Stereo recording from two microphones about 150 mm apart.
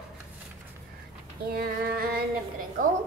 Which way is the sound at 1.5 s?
85° right.